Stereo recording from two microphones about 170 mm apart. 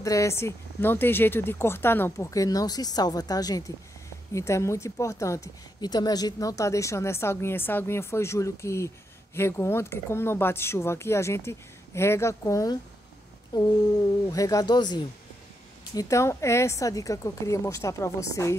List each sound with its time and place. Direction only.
0.0 s speech: 20° left (ahead or behind)